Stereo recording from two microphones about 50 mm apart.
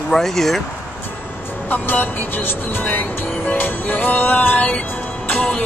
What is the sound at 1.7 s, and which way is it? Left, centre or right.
Speech, left.